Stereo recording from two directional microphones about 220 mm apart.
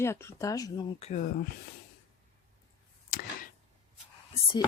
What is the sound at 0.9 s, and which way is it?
Speech, 30° left (ahead or behind).